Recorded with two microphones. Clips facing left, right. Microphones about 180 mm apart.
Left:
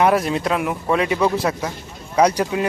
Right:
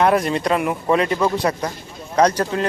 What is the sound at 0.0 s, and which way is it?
Speech, centre (ahead or behind).